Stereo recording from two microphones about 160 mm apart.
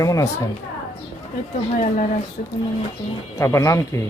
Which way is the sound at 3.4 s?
20° left (ahead or behind).